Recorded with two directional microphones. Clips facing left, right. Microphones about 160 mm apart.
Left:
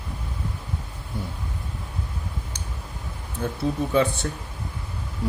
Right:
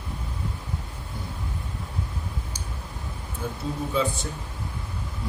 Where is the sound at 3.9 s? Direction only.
70° left (ahead or behind).